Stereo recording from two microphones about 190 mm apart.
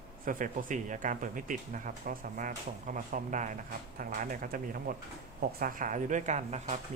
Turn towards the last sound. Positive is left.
turn(degrees=-35)  # may be behind; listen again after turning